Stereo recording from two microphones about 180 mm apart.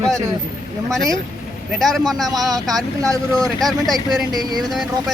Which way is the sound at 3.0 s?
20° right (ahead or behind).